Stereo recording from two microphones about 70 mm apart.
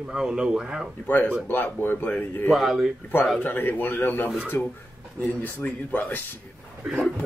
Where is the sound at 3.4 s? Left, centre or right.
Left.